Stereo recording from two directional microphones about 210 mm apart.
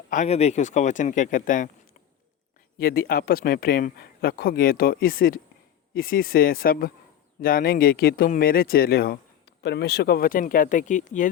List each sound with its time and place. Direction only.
0.1 s speech: 35° left (ahead or behind)
2.7 s speech: 45° left (ahead or behind)